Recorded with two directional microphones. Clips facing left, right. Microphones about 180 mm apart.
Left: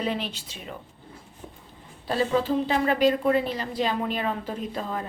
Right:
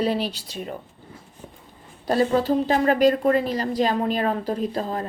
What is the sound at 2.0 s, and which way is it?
A woman's voice, 40° right (ahead or behind).